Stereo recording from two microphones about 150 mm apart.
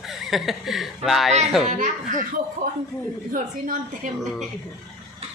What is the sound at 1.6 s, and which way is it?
Speech, 55° right (ahead or behind).